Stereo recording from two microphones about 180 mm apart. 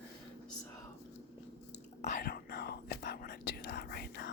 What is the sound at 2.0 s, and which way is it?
Whispering, 50° left (ahead or behind).